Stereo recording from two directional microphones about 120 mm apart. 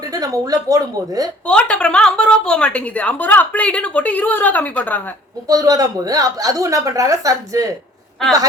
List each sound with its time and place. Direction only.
0.0 s a woman's voice: 30° right (ahead or behind)
1.5 s a woman's voice: 10° left (ahead or behind)
5.5 s a woman's voice: 30° right (ahead or behind)